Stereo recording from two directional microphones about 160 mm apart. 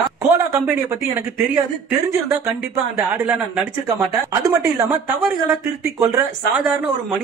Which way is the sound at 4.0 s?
20° right (ahead or behind).